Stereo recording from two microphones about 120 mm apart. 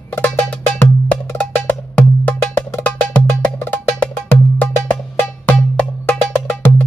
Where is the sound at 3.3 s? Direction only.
15° left (ahead or behind).